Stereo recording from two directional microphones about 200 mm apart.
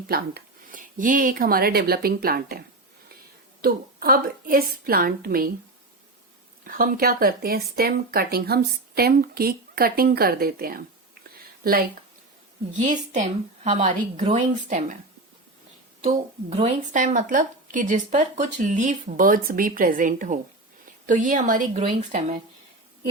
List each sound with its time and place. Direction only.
0.1 s speech: 45° right (ahead or behind)
6.7 s speech: 45° right (ahead or behind)
12.8 s speech: 40° right (ahead or behind)
16.0 s speech: 30° right (ahead or behind)